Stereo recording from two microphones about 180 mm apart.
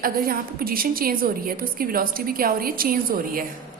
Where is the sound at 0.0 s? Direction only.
55° right (ahead or behind).